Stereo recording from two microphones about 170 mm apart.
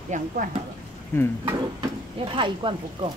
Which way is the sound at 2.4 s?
30° right (ahead or behind).